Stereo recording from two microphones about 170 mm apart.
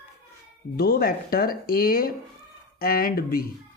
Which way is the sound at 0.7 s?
60° left (ahead or behind).